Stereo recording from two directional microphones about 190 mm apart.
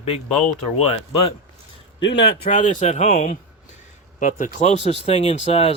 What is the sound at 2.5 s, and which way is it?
Speech, 40° left (ahead or behind).